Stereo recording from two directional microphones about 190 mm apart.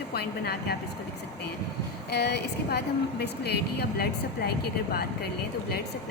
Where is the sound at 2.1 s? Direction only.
60° left (ahead or behind).